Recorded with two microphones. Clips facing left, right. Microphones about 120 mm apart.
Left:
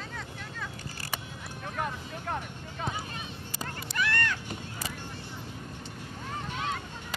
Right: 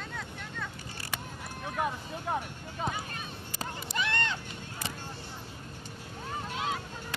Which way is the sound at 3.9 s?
20° right (ahead or behind).